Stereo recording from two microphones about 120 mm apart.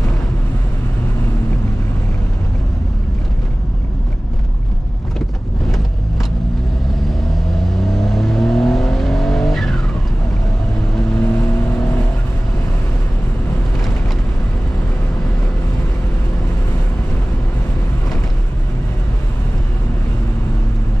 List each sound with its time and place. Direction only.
7.9 s vehicle: centre (ahead or behind)
11.1 s vehicle: 20° left (ahead or behind)